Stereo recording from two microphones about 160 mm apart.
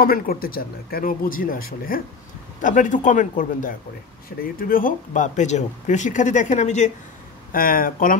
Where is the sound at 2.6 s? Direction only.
55° left (ahead or behind).